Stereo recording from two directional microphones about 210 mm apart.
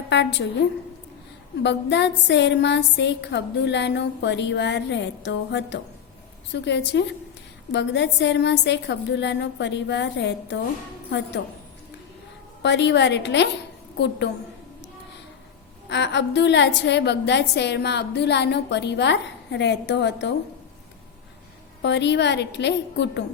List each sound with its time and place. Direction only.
0.1 s a woman's voice: 55° left (ahead or behind)
1.6 s a woman's voice: 55° left (ahead or behind)
12.6 s a woman's voice: 55° left (ahead or behind)
15.9 s a woman's voice: 55° left (ahead or behind)
21.8 s a woman's voice: 55° left (ahead or behind)